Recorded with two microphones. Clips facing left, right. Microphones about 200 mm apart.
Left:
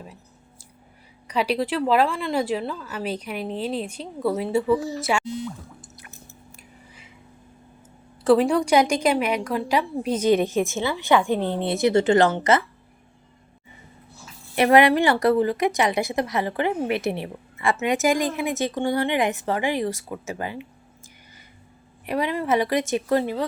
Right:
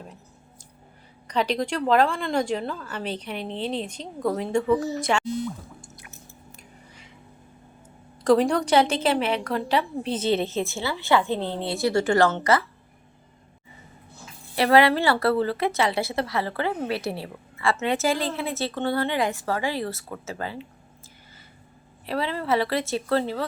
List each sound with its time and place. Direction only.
1.3 s a woman's voice: 10° left (ahead or behind)
8.2 s a woman's voice: 5° left (ahead or behind); by 12.6 s 20° left (ahead or behind)
14.5 s a woman's voice: 20° left (ahead or behind)
22.0 s a woman's voice: 15° left (ahead or behind)